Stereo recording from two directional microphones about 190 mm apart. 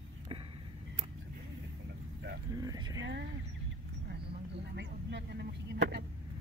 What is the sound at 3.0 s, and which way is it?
Speech, 70° right (ahead or behind).